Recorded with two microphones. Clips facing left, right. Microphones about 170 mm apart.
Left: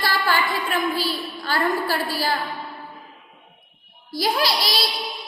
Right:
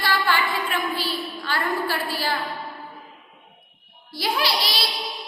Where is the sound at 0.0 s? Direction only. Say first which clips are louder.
Left 1 dB; 40° left (ahead or behind).